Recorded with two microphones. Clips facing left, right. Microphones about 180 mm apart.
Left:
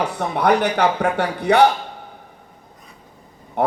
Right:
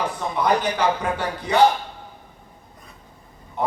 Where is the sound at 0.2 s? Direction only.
65° left (ahead or behind).